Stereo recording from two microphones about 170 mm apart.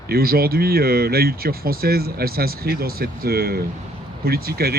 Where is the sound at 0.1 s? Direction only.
65° right (ahead or behind).